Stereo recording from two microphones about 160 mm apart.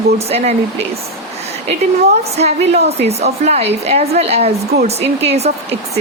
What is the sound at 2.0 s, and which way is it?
A woman's voice, 40° right (ahead or behind).